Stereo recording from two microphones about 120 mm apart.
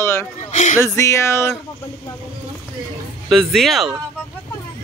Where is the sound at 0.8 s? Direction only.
25° left (ahead or behind).